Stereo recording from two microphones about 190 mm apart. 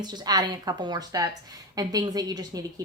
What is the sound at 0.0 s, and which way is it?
A woman's voice, 20° right (ahead or behind).